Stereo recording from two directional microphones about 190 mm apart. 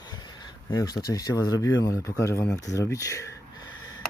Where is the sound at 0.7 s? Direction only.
20° left (ahead or behind).